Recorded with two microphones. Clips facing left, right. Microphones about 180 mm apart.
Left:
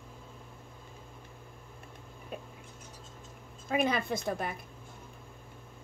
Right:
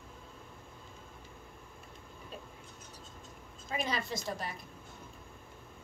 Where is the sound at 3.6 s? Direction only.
55° left (ahead or behind).